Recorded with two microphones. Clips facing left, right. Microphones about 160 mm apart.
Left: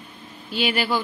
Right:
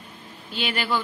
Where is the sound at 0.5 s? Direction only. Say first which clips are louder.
Left 3 dB; 10° left (ahead or behind).